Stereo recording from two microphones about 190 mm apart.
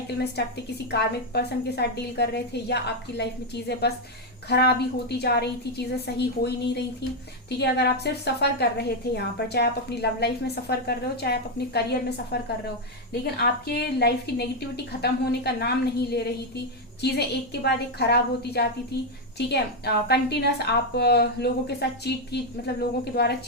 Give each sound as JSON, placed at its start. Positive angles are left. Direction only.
{"t": 0.3, "sound": "a woman's voice", "side_deg": 60}
{"t": 7.6, "sound": "a woman's voice", "side_deg": 60}
{"t": 13.4, "sound": "a woman's voice", "side_deg": 60}